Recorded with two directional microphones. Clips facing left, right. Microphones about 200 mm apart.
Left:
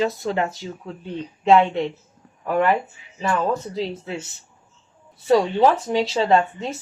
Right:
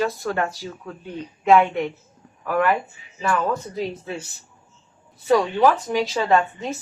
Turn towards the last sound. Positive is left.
turn(degrees=25)  # may be behind; listen again after turning